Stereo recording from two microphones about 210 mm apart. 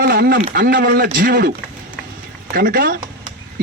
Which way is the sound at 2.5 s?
45° right (ahead or behind).